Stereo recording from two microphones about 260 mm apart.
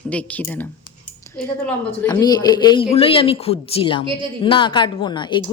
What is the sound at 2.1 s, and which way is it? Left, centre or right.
A woman's voice, centre.